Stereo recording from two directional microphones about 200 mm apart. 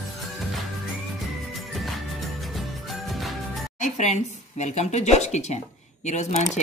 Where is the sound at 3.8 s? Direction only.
35° left (ahead or behind).